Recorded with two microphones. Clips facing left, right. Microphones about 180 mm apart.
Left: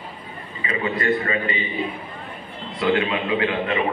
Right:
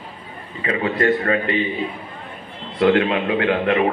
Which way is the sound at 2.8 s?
60° right (ahead or behind).